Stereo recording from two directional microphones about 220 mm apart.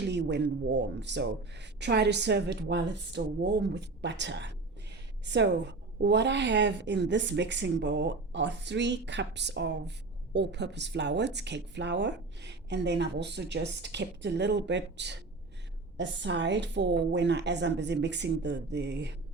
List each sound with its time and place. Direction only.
0.0 s speech: 50° right (ahead or behind)